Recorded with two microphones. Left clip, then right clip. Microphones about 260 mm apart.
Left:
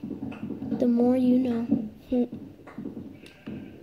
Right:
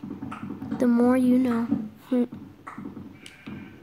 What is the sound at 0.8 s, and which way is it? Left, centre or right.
Speech, right.